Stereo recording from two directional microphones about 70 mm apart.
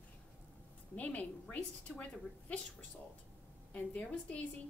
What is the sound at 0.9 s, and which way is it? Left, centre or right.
A woman's voice, left.